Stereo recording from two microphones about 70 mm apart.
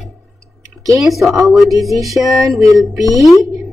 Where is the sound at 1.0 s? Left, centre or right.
Centre.